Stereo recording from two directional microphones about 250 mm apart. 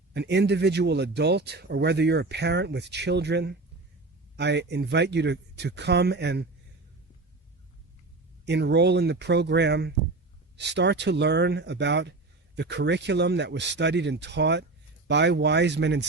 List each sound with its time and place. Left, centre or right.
0.1 s speech: right
8.4 s speech: right